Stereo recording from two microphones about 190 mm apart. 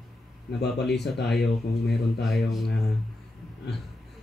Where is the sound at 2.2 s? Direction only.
Centre (ahead or behind).